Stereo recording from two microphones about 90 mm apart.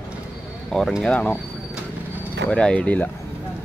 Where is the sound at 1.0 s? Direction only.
10° left (ahead or behind).